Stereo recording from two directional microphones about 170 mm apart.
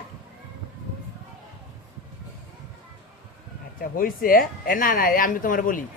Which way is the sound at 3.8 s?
55° left (ahead or behind).